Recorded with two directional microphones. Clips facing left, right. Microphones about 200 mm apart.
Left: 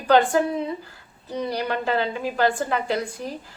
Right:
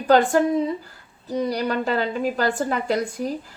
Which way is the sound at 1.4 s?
40° right (ahead or behind).